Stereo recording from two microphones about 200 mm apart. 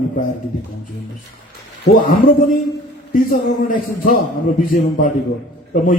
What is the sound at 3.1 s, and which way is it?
A man's voice, 45° left (ahead or behind).